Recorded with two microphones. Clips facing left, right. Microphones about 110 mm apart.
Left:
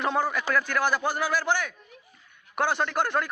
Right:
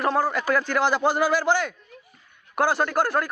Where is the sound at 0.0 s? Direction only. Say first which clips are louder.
Right 3 dB; 5° right (ahead or behind).